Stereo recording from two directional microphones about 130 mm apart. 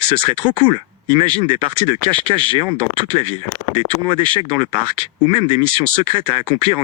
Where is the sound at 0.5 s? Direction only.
40° right (ahead or behind).